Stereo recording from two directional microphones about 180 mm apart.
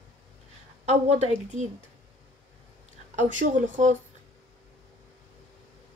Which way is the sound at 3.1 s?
40° right (ahead or behind).